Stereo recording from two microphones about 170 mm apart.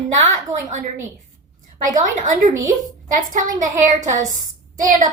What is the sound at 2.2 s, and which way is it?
A child's voice, 50° right (ahead or behind).